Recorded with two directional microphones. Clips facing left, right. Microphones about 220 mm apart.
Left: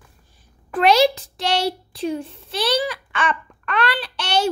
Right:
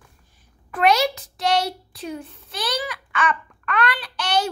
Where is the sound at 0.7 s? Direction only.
30° left (ahead or behind).